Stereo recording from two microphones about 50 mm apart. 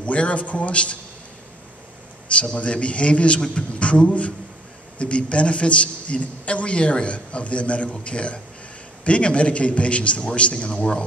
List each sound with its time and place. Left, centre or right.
0.0 s a man's voice: left
2.3 s a man's voice: left